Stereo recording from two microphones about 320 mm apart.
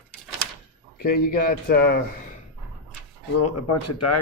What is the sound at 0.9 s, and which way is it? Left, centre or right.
Speech, left.